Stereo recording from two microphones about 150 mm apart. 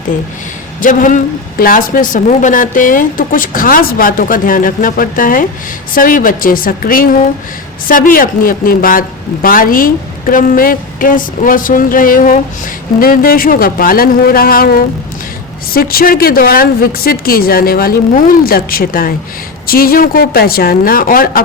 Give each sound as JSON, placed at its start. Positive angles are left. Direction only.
{"t": 0.8, "sound": "speech", "side_deg": 60}